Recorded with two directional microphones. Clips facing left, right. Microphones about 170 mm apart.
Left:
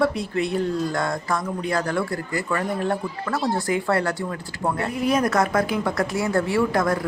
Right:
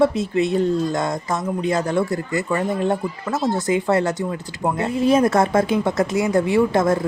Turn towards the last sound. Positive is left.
turn(degrees=-25)  # may be behind; listen again after turning